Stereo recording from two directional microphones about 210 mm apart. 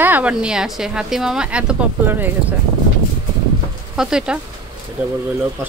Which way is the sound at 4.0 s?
5° right (ahead or behind).